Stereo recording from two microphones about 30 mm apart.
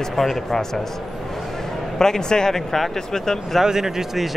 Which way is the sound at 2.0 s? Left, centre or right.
Centre.